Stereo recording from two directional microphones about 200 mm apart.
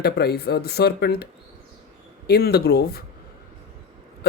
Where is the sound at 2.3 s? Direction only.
50° left (ahead or behind).